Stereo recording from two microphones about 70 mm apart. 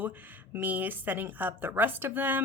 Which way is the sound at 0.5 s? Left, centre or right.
Right.